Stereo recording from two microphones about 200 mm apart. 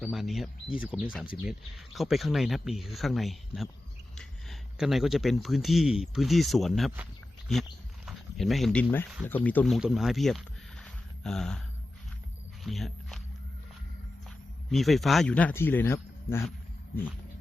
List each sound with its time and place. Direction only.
0.0 s speech: centre (ahead or behind)
12.6 s speech: centre (ahead or behind)
14.7 s a man's voice: centre (ahead or behind)